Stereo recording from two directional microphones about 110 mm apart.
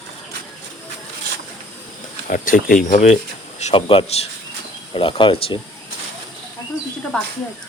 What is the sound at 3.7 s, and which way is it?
Speech, 55° left (ahead or behind).